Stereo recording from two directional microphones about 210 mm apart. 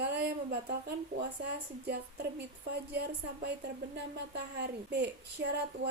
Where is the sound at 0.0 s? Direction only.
50° right (ahead or behind).